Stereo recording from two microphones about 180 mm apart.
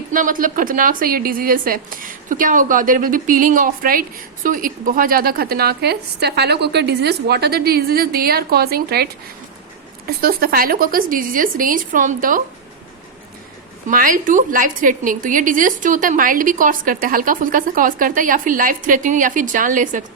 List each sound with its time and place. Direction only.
0.1 s a woman's voice: 50° right (ahead or behind)
10.1 s a woman's voice: 55° right (ahead or behind)
13.8 s a woman's voice: 50° right (ahead or behind)